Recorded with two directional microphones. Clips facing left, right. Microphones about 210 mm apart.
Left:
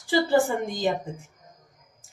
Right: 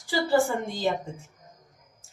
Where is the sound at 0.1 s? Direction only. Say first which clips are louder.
Left 2 dB; 20° left (ahead or behind).